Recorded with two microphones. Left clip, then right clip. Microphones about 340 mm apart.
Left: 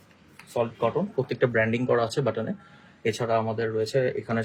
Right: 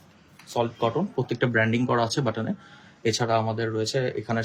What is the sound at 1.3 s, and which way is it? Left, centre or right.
Speech, centre.